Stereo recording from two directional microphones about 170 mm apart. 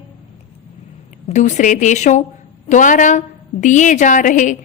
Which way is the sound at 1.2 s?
45° left (ahead or behind).